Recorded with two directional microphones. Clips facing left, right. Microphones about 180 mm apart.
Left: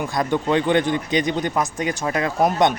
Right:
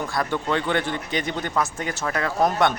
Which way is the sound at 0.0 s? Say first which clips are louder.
Left 4 dB; 20° left (ahead or behind).